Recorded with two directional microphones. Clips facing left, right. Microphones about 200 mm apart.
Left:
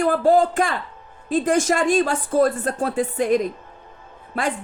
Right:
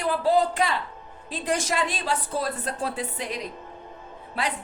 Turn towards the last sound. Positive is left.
turn(degrees=50)  # may be behind; listen again after turning